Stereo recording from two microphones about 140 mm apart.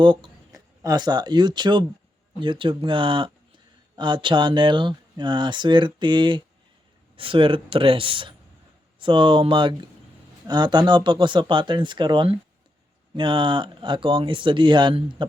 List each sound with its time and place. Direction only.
0.0 s speech: 35° right (ahead or behind)